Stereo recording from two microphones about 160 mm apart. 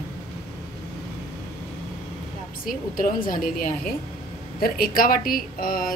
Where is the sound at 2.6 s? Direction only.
60° left (ahead or behind).